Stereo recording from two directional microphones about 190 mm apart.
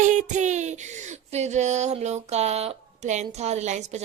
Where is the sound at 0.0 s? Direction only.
40° right (ahead or behind).